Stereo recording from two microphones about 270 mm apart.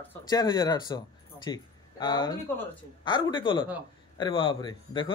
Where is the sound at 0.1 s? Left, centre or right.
Centre.